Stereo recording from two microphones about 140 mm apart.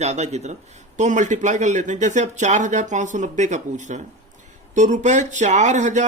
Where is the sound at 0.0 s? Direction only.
50° right (ahead or behind).